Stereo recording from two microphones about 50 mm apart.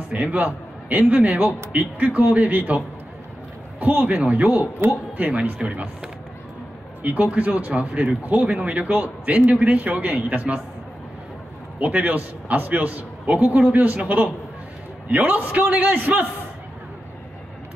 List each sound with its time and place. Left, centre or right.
0.1 s a man's voice: right
3.8 s speech: right
7.0 s a man's voice: right
11.8 s a man's voice: right